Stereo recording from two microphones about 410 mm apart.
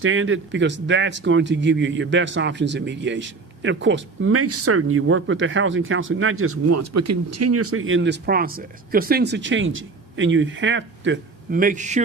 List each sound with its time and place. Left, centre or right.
0.0 s speech: right